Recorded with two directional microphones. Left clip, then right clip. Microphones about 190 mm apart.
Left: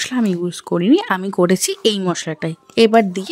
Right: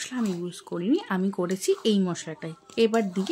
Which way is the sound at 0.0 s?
50° left (ahead or behind).